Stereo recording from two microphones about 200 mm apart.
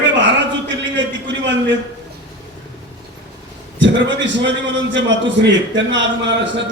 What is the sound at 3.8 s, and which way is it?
A man's voice, 65° right (ahead or behind).